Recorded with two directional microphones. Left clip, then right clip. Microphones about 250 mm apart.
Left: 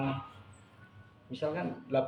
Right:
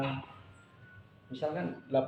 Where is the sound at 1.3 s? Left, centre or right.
Left.